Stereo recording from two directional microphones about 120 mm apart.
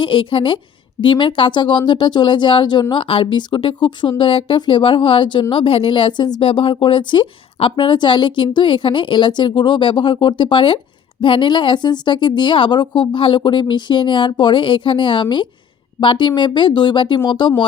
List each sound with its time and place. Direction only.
0.0 s a woman's voice: 45° left (ahead or behind)
6.5 s a woman's voice: 50° left (ahead or behind)